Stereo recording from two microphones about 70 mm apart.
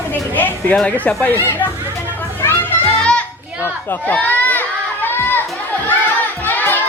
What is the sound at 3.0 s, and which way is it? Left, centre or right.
Children playing, centre.